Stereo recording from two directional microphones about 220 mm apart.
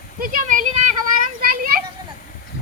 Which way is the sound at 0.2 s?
40° right (ahead or behind).